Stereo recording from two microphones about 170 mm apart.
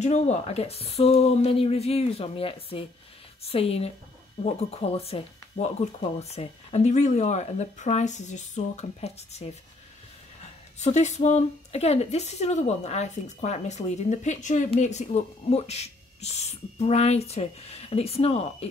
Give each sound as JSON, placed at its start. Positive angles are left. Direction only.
{"t": 0.0, "sound": "a woman's voice", "side_deg": 40}